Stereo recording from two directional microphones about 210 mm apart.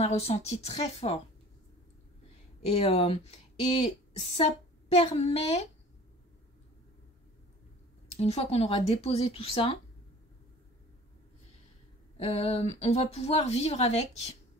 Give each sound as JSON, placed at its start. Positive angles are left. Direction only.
{"t": 0.0, "sound": "a woman's voice", "side_deg": 30}
{"t": 2.6, "sound": "a woman's voice", "side_deg": 30}
{"t": 8.2, "sound": "speech", "side_deg": 30}
{"t": 12.2, "sound": "speech", "side_deg": 30}